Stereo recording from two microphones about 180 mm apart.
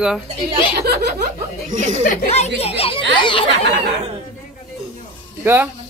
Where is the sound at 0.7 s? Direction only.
65° right (ahead or behind).